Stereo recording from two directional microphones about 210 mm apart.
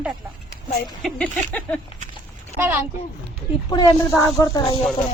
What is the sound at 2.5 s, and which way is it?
Speech, 10° right (ahead or behind).